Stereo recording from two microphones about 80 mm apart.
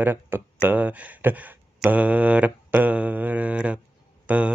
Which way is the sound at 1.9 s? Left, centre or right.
Centre.